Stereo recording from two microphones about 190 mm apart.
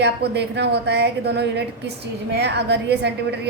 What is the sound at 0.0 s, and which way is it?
A woman's voice, 65° right (ahead or behind).